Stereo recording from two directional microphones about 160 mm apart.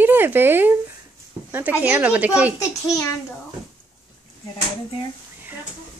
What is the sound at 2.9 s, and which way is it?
Speech, 20° left (ahead or behind).